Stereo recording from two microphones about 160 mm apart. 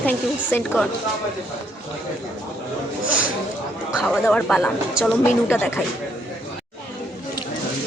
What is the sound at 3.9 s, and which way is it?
A woman's voice, 5° right (ahead or behind).